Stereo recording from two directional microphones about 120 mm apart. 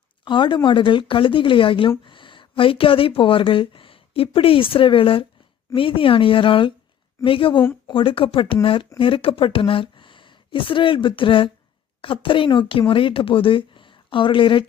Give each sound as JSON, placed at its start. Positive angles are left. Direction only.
{"t": 0.3, "sound": "speech", "side_deg": 40}